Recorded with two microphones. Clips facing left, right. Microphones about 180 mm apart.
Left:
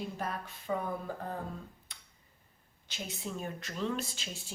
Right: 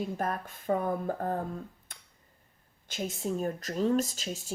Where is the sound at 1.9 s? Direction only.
50° right (ahead or behind).